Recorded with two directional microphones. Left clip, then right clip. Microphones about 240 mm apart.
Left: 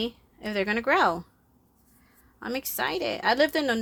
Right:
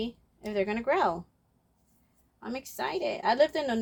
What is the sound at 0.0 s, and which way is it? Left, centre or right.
A woman's voice, left.